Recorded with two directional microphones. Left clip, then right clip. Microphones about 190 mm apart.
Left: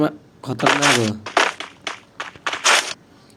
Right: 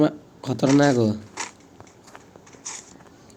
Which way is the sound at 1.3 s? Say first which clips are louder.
Left 17 dB; 60° left (ahead or behind).